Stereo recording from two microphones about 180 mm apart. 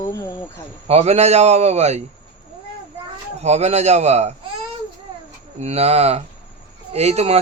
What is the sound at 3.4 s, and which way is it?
Speech, 35° right (ahead or behind).